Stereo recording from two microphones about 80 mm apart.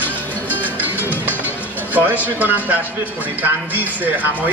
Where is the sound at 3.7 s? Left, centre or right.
Right.